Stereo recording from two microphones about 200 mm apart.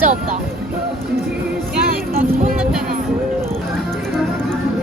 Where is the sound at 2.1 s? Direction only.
45° right (ahead or behind).